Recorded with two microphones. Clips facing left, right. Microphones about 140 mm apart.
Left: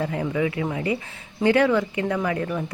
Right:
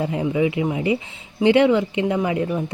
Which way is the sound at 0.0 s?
20° right (ahead or behind).